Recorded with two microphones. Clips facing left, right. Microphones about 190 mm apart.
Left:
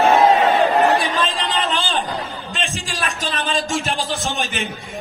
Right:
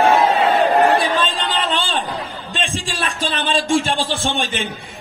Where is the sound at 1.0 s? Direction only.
30° right (ahead or behind).